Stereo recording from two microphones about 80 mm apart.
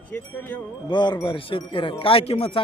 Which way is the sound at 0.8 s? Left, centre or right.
Left.